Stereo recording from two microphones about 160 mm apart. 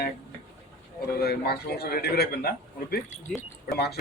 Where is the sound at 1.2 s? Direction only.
80° left.